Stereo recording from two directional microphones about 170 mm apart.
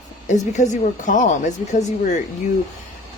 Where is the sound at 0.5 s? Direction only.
45° left (ahead or behind).